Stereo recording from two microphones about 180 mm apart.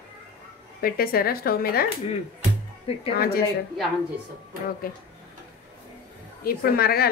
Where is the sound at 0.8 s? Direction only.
55° left (ahead or behind).